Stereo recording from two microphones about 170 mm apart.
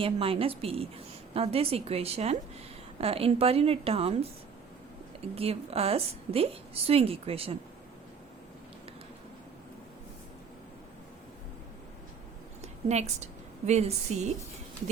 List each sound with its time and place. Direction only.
0.0 s a woman's voice: 35° right (ahead or behind)
5.3 s a woman's voice: 35° right (ahead or behind)
12.6 s a sound: 40° right (ahead or behind)
13.7 s a woman's voice: 40° right (ahead or behind)